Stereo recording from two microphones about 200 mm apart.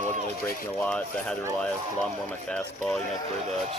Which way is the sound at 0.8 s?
5° left (ahead or behind).